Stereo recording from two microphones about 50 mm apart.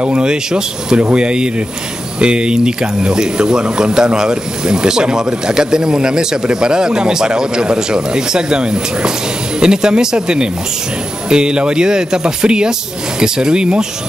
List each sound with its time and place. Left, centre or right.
0.0 s speech: right